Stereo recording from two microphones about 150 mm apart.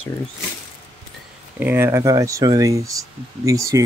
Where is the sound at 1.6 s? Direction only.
15° right (ahead or behind).